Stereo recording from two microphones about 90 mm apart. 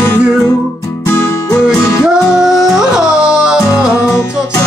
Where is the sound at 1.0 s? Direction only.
30° left (ahead or behind).